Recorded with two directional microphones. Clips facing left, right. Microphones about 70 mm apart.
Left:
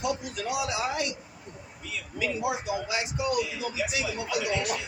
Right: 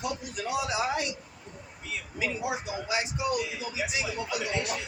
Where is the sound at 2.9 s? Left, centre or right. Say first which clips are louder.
Right 3 dB; right.